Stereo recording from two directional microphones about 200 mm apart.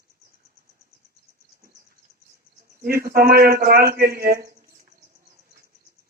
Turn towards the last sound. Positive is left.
turn(degrees=-45)  # may be behind; listen again after turning